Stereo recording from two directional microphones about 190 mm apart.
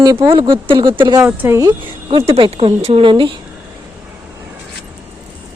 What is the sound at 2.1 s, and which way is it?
A woman's voice, 30° right (ahead or behind).